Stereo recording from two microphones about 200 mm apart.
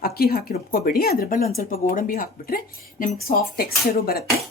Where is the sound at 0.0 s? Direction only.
50° left (ahead or behind).